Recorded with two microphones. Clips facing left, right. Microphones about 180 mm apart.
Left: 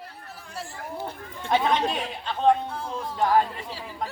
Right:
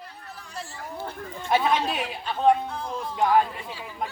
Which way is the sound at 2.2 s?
5° right (ahead or behind).